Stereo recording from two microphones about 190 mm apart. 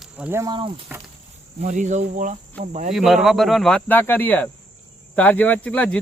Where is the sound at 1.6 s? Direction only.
40° right (ahead or behind).